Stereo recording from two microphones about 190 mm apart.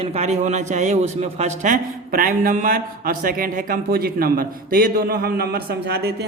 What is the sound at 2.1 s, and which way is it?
Speech, 50° right (ahead or behind).